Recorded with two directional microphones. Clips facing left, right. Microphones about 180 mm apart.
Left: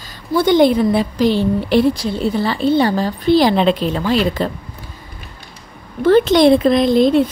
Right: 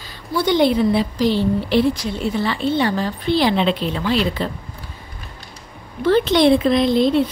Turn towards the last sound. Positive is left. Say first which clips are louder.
# left 3 dB
turn(degrees=45)  # may be behind; listen again after turning